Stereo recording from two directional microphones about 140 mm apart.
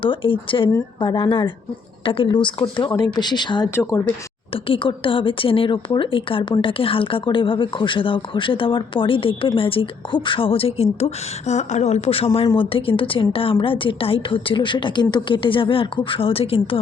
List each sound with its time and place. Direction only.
0.0 s a woman's voice: 35° left (ahead or behind)
3.8 s speech: 20° left (ahead or behind)
4.5 s a woman's voice: 40° left (ahead or behind)